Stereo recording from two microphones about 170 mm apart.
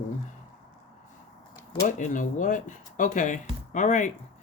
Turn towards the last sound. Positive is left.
turn(degrees=45)  # may be behind; listen again after turning